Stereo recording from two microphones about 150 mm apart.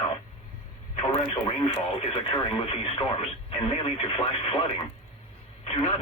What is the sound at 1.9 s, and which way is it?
Speech, 40° left (ahead or behind).